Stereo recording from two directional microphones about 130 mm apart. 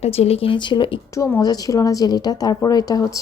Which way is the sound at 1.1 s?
25° left (ahead or behind).